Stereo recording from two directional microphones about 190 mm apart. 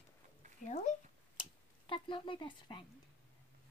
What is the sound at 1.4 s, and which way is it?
Speech, 25° left (ahead or behind).